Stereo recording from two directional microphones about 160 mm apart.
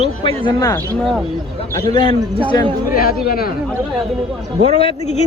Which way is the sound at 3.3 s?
70° left (ahead or behind).